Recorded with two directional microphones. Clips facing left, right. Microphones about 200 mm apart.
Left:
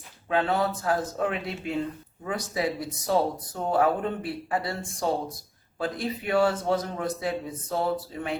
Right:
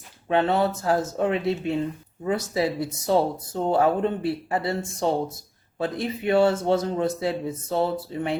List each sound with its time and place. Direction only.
0.3 s speech: 25° right (ahead or behind)